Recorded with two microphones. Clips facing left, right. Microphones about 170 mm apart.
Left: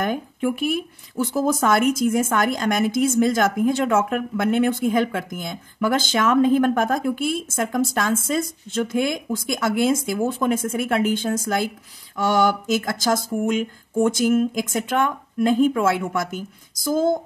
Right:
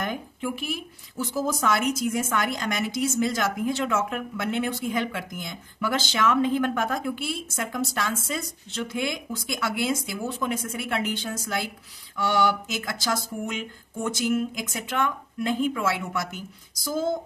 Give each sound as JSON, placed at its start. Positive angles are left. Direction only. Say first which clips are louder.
{"t": 0.0, "sound": "speech", "louder": "left 7 dB", "side_deg": 50}